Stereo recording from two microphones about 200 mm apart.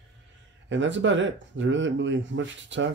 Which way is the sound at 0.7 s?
65° right (ahead or behind).